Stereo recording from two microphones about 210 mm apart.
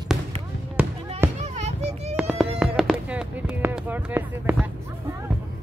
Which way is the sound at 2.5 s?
5° right (ahead or behind).